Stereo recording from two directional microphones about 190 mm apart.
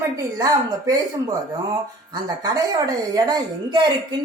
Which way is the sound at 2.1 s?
20° right (ahead or behind).